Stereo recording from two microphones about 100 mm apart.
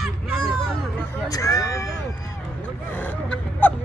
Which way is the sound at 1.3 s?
35° left (ahead or behind).